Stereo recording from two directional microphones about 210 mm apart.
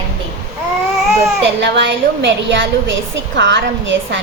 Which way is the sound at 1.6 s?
55° right (ahead or behind).